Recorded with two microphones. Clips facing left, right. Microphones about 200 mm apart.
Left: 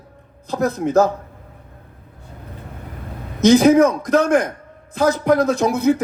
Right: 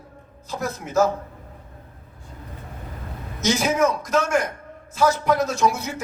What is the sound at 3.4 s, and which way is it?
A man's voice, 60° left (ahead or behind).